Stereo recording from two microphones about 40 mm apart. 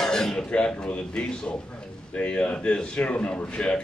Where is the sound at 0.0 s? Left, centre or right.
Centre.